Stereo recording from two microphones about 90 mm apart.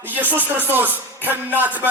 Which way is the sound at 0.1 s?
20° right (ahead or behind).